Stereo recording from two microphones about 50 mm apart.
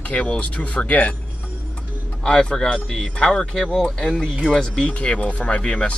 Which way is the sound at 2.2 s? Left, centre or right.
Centre.